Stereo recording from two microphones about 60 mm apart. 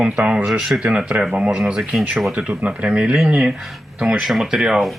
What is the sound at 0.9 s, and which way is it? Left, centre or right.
Speech, right.